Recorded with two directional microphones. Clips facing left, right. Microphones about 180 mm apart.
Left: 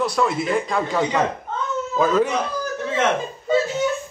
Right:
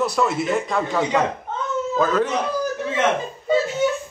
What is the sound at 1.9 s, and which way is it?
Speech, 10° left (ahead or behind).